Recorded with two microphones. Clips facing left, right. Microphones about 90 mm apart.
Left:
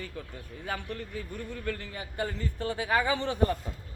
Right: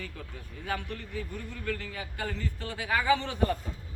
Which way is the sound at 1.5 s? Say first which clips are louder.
Even; 20° left (ahead or behind).